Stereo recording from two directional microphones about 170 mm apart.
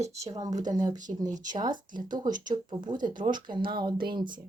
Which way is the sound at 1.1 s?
45° right (ahead or behind).